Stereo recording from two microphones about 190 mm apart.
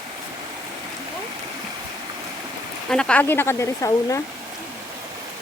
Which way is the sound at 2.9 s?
5° left (ahead or behind).